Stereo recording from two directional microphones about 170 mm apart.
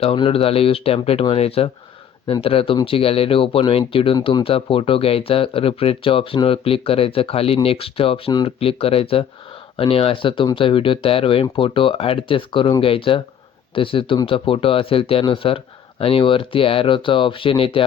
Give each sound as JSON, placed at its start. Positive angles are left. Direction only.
{"t": 0.0, "sound": "speech", "side_deg": 35}